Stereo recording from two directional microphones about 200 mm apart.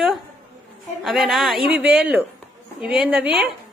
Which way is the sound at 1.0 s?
Centre (ahead or behind).